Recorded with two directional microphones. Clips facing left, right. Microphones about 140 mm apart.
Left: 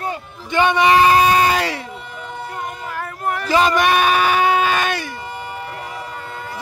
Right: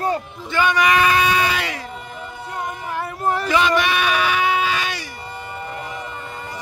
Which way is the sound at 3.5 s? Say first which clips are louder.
Left 5 dB; 45° left (ahead or behind).